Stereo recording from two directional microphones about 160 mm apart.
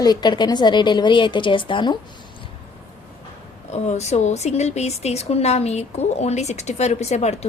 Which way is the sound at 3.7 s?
45° left (ahead or behind).